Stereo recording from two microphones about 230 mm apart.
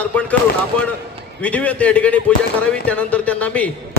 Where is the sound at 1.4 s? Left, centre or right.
Centre.